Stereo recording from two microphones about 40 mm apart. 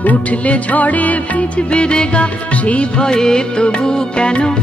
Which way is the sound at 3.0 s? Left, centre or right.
Centre.